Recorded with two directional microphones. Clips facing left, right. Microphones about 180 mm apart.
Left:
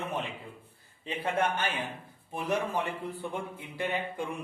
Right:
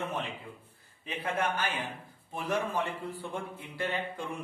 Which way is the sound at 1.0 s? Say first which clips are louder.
Left 2 dB; 30° left (ahead or behind).